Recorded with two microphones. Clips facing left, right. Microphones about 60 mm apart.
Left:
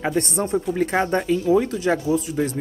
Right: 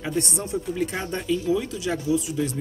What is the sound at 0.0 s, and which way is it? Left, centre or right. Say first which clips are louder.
Speech: left 5 dB; left.